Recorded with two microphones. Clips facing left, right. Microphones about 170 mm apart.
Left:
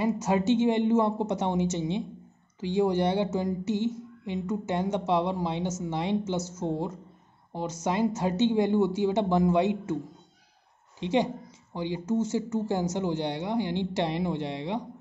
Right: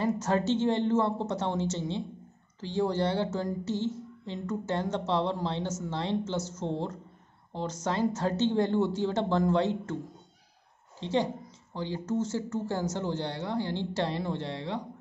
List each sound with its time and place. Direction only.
0.0 s a woman's voice: 10° left (ahead or behind)
11.0 s a woman's voice: 15° left (ahead or behind)